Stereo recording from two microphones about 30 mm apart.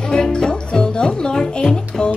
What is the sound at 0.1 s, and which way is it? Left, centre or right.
Music, left.